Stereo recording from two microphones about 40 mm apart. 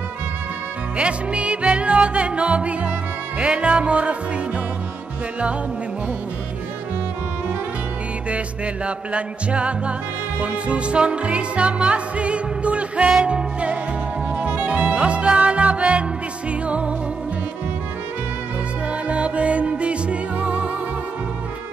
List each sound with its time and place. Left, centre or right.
0.9 s music: right
8.8 s music: right
19.0 s music: right